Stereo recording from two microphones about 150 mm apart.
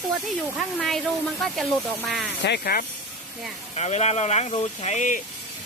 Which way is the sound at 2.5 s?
85° left.